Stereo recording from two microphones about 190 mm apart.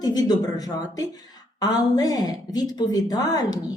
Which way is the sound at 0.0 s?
20° left (ahead or behind).